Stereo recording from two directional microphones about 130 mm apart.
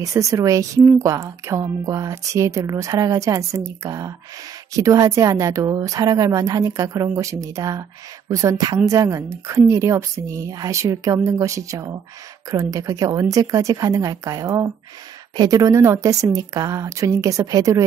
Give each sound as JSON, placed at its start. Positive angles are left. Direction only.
{"t": 0.0, "sound": "speech", "side_deg": -25}